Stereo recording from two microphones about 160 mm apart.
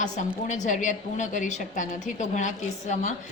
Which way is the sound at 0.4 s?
50° left (ahead or behind).